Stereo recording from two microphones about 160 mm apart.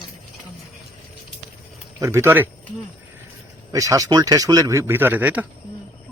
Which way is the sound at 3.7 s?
20° right (ahead or behind).